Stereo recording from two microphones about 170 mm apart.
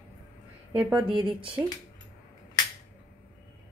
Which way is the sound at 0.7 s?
10° right (ahead or behind).